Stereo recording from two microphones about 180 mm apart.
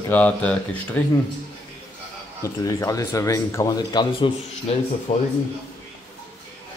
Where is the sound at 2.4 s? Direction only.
20° left (ahead or behind).